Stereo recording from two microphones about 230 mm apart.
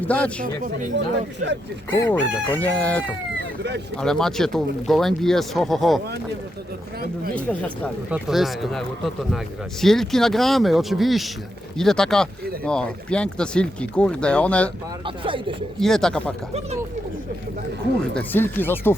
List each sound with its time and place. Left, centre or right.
0.0 s speech: centre
1.9 s chicken: centre
3.9 s speech: centre
8.1 s speech: centre
15.0 s speech: right
15.8 s speech: centre
18.1 s chicken: centre